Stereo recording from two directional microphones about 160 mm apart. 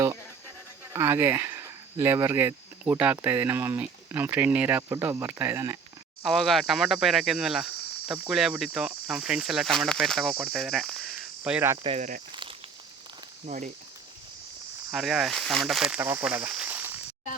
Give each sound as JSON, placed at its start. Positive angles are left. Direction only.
{"t": 0.9, "sound": "speech", "side_deg": -15}
{"t": 6.2, "sound": "speech", "side_deg": 0}
{"t": 11.8, "sound": "speech", "side_deg": -35}
{"t": 12.3, "sound": "a sound", "side_deg": -30}
{"t": 13.4, "sound": "speech", "side_deg": -50}
{"t": 14.9, "sound": "speech", "side_deg": -5}
{"t": 16.0, "sound": "speech", "side_deg": -15}